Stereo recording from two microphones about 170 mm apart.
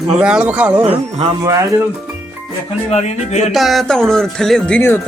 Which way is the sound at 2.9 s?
40° left (ahead or behind).